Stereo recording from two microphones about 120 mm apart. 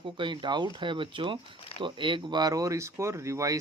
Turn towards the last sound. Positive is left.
turn(degrees=-25)  # may be behind; listen again after turning